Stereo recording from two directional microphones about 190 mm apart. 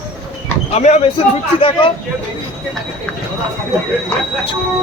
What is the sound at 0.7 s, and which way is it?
Speech, 35° left (ahead or behind).